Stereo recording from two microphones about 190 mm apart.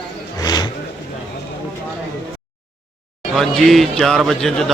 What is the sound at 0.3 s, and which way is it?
Vehicle, 20° left (ahead or behind).